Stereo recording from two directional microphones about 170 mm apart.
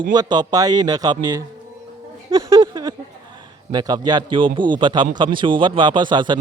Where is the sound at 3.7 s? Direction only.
25° right (ahead or behind).